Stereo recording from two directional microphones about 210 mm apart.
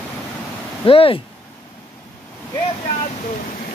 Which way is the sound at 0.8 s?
25° left (ahead or behind).